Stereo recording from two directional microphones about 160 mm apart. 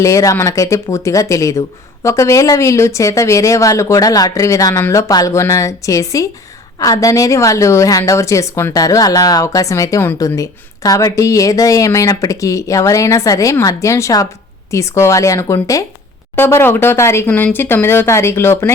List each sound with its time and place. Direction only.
0.0 s a woman's voice: 20° left (ahead or behind)